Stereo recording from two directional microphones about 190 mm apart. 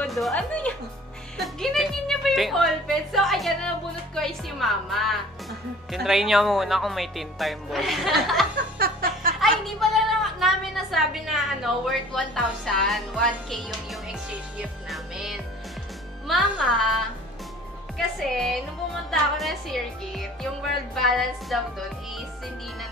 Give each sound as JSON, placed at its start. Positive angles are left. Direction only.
{"t": 0.0, "sound": "a woman's voice", "side_deg": 0}
{"t": 8.7, "sound": "music", "side_deg": -50}
{"t": 9.4, "sound": "a woman's voice", "side_deg": 0}
{"t": 14.6, "sound": "music", "side_deg": 0}
{"t": 16.3, "sound": "a woman's voice", "side_deg": 0}
{"t": 17.9, "sound": "a woman's voice", "side_deg": 0}